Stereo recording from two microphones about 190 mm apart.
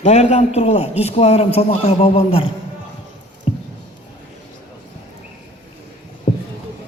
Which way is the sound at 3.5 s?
30° left (ahead or behind).